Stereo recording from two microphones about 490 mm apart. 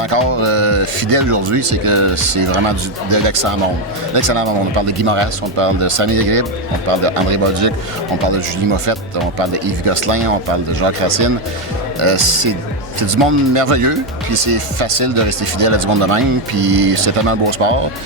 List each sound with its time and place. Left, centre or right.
0.0 s speech: right